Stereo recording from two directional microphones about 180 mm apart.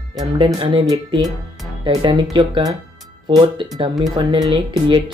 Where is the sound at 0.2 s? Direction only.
25° right (ahead or behind).